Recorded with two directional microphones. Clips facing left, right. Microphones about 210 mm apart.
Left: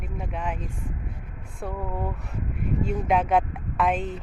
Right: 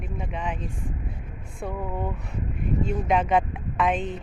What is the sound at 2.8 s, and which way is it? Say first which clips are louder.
Speech: even; 5° left (ahead or behind).